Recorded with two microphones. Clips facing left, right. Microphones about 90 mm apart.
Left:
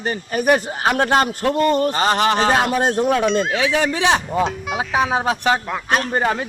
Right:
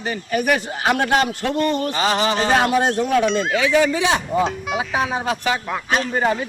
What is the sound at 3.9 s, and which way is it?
Speech, 70° left (ahead or behind).